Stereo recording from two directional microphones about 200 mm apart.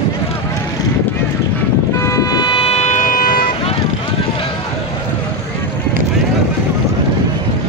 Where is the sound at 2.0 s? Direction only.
15° left (ahead or behind); by 3.5 s 45° left (ahead or behind).